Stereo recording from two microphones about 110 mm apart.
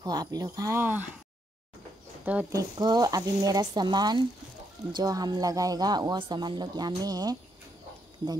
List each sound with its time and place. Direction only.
0.0 s speech: 35° right (ahead or behind)
2.5 s speech: 35° right (ahead or behind)